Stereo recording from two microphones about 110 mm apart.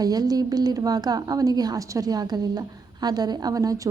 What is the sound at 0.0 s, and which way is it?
A woman's voice, 35° right (ahead or behind).